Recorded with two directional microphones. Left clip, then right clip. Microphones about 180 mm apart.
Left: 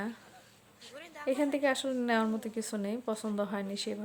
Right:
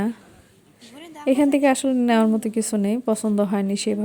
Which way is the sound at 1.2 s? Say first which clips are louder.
Right 11 dB; 40° right (ahead or behind).